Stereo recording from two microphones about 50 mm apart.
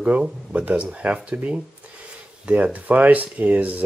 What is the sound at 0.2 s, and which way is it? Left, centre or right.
Speech, right.